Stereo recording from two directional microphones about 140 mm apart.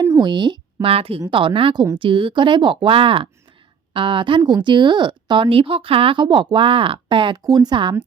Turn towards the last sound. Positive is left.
turn(degrees=-35)  # may be behind; listen again after turning